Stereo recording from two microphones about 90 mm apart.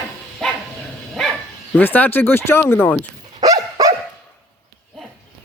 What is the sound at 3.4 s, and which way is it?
Dog, 40° right (ahead or behind).